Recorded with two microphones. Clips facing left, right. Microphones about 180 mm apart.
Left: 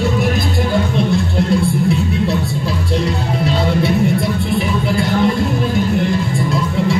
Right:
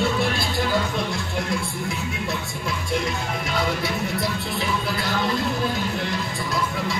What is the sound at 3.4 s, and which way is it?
Music, 30° left (ahead or behind).